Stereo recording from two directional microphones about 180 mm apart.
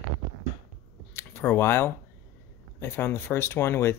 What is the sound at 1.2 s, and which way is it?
Speech, 15° left (ahead or behind).